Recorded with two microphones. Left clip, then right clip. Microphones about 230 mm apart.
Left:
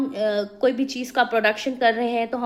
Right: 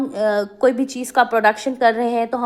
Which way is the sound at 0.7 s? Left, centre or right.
Right.